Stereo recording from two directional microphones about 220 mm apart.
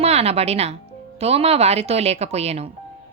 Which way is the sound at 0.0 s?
30° right (ahead or behind).